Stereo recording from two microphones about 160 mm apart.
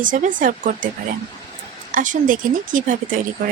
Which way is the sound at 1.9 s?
55° right (ahead or behind).